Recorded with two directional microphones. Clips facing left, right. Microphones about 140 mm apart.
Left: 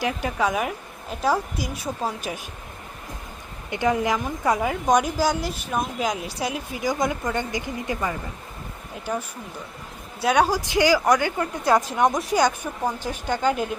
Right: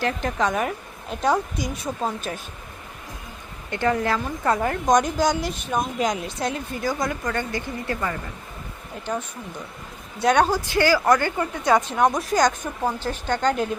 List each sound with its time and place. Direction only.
0.0 s speech: 10° left (ahead or behind)
3.7 s speech: 15° left (ahead or behind)
7.0 s speech: 20° left (ahead or behind)